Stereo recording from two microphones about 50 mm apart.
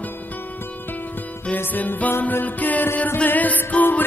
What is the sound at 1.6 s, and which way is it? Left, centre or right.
Music, left.